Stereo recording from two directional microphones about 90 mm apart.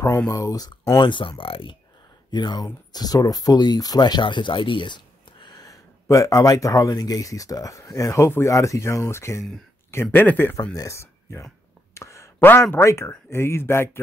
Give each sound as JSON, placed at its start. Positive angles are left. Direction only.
{"t": 0.3, "sound": "speech", "side_deg": 40}
{"t": 0.7, "sound": "speech", "side_deg": 55}
{"t": 1.4, "sound": "speech", "side_deg": 80}
{"t": 2.3, "sound": "speech", "side_deg": 55}
{"t": 6.0, "sound": "speech", "side_deg": 35}
{"t": 11.9, "sound": "whispering", "side_deg": 30}
{"t": 12.4, "sound": "speech", "side_deg": 25}